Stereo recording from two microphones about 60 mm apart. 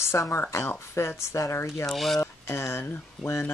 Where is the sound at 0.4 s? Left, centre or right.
Left.